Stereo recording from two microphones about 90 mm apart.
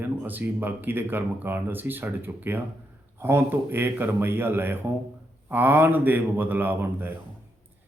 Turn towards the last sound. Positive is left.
turn(degrees=-25)  # may be behind; listen again after turning